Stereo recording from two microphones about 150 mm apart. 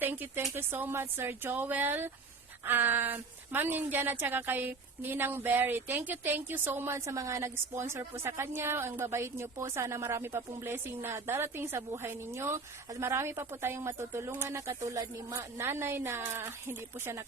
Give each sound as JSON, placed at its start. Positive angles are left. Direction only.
{"t": 0.0, "sound": "a woman's voice", "side_deg": -15}